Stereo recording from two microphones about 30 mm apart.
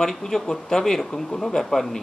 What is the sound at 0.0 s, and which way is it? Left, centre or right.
Speech, centre.